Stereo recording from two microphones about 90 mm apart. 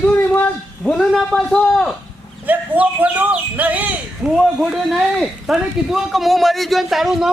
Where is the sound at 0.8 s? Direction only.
5° left (ahead or behind).